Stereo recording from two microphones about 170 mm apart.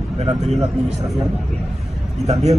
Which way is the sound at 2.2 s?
40° right (ahead or behind).